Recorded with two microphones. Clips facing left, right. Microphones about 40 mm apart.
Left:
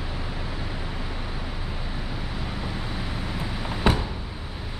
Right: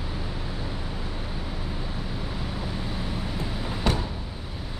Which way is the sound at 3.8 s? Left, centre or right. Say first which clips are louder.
Left 4 dB; left.